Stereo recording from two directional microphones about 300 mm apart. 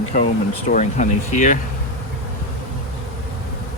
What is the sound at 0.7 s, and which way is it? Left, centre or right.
Speech, left.